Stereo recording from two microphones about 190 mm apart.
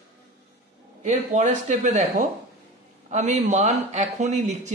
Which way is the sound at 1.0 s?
40° right (ahead or behind).